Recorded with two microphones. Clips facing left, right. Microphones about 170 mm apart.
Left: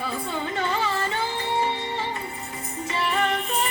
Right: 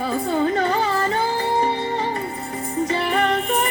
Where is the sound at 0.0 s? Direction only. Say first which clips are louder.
Right 9 dB; 40° right (ahead or behind).